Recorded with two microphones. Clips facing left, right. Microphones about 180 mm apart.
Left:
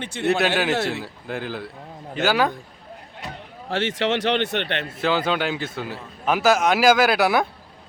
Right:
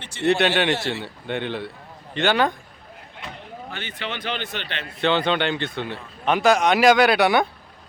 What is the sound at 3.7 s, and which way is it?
Speech, 90° left.